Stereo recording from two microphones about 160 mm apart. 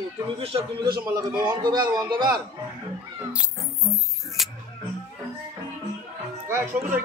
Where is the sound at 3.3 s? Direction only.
5° right (ahead or behind).